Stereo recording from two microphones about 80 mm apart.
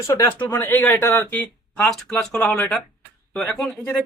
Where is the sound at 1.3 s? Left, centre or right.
Centre.